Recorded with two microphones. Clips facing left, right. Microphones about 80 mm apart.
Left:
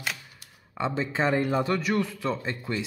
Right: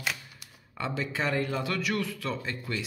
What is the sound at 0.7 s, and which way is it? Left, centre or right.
Speech, left.